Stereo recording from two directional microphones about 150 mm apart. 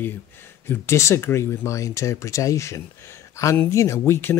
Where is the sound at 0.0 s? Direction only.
15° left (ahead or behind).